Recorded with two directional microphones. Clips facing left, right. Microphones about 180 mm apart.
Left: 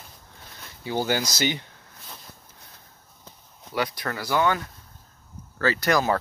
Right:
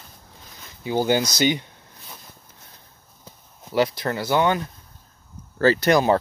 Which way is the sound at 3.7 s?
25° right (ahead or behind).